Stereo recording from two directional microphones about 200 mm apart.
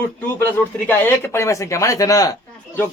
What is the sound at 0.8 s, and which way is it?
Speech, 10° left (ahead or behind).